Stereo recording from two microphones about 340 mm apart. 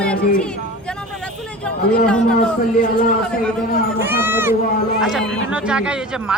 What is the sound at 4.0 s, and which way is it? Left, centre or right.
Speech, centre.